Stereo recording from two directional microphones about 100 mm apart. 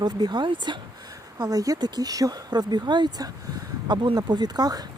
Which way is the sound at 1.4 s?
40° right (ahead or behind).